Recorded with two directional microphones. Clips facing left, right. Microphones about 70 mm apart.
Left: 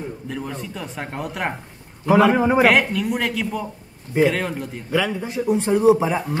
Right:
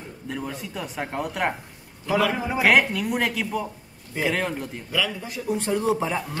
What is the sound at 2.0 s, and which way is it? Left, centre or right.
Speech, left.